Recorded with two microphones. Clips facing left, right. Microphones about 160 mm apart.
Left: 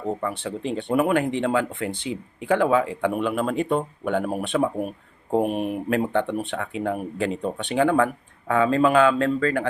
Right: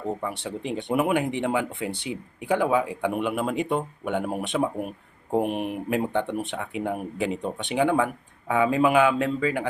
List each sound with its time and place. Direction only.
0.2 s speech: 15° right (ahead or behind)